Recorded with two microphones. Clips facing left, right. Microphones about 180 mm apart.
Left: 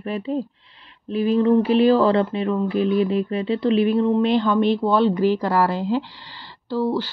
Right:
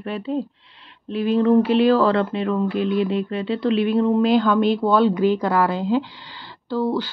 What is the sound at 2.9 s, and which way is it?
Speech, 35° left (ahead or behind).